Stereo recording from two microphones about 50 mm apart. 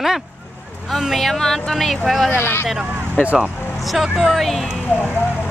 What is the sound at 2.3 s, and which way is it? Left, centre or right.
Speech, left.